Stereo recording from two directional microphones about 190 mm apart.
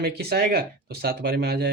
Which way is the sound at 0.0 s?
55° right (ahead or behind).